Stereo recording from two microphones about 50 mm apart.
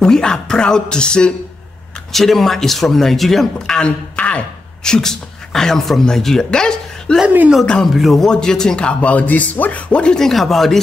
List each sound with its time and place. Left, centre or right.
0.0 s speech: centre
2.1 s speech: centre
7.2 s speech: right
7.8 s speech: centre
8.3 s speech: centre
10.1 s speech: centre